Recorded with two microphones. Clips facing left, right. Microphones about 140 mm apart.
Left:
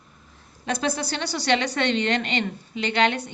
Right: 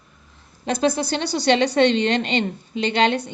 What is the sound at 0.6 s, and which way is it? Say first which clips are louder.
A woman's voice: right 5 dB; 25° right (ahead or behind).